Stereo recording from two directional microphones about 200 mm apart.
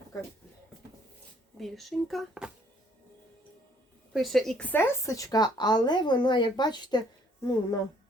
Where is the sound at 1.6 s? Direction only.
Centre (ahead or behind).